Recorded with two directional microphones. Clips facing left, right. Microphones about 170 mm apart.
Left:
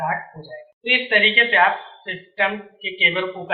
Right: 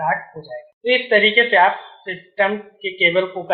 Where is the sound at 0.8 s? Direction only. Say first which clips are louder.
Right 7 dB; 35° right (ahead or behind).